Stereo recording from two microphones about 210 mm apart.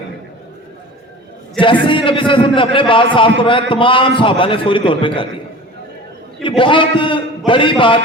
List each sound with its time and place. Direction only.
1.9 s a man's voice: 25° left (ahead or behind)
6.6 s a man's voice: 25° left (ahead or behind)